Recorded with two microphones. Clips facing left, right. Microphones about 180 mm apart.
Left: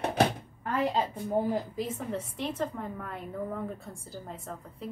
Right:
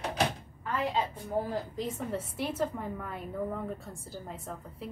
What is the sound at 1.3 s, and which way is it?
Speech, 20° left (ahead or behind).